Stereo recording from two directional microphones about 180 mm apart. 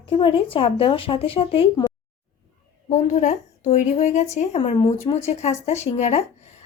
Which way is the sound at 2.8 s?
40° left (ahead or behind).